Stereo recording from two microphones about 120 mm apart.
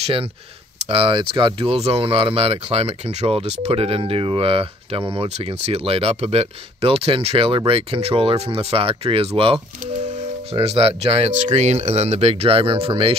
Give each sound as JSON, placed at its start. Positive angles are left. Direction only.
{"t": 0.0, "sound": "speech", "side_deg": -50}